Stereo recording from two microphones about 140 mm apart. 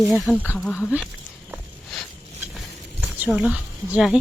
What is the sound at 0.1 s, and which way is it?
Speech, centre (ahead or behind).